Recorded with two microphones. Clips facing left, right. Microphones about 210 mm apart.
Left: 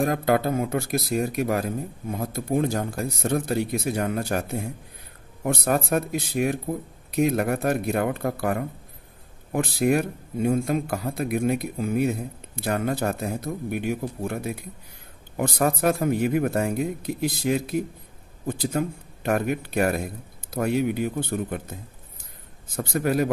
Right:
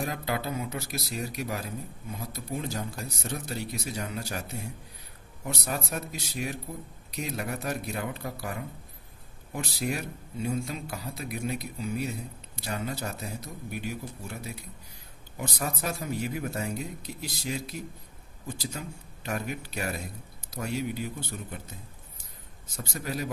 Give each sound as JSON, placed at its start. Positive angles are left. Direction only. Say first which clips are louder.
{"t": 0.0, "sound": "a man's voice", "louder": "left 10 dB", "side_deg": 50}
{"t": 22.8, "sound": "a man's voice", "louder": "left 11 dB", "side_deg": 55}